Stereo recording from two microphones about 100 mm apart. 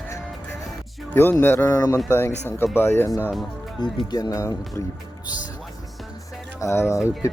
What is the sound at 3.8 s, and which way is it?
Speech, 45° left (ahead or behind).